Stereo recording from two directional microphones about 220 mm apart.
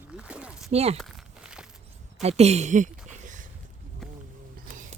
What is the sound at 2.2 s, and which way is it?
Speech, 30° right (ahead or behind).